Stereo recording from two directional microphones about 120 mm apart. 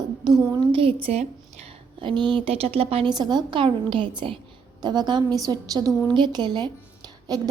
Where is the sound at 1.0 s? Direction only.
60° right (ahead or behind).